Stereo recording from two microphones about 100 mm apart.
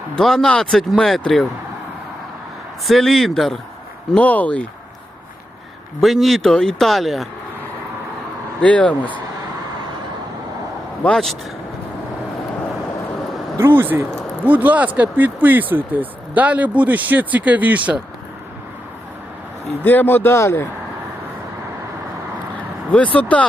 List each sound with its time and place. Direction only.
0.2 s a man's voice: 5° left (ahead or behind)
2.8 s a man's voice: centre (ahead or behind)
4.1 s speech: 15° left (ahead or behind)
6.0 s a man's voice: centre (ahead or behind)
8.6 s speech: 15° left (ahead or behind)
11.0 s a man's voice: 5° left (ahead or behind)
13.6 s speech: 20° right (ahead or behind)
19.8 s a man's voice: 20° left (ahead or behind)
23.1 s speech: 15° left (ahead or behind)